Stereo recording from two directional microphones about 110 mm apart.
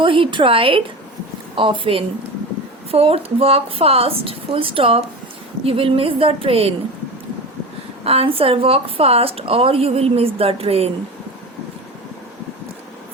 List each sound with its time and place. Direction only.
0.0 s a woman's voice: 50° right (ahead or behind)
8.0 s speech: 65° right (ahead or behind)